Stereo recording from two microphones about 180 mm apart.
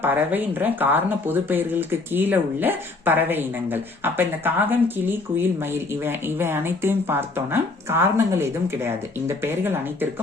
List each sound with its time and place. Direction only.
0.0 s speech: 10° right (ahead or behind)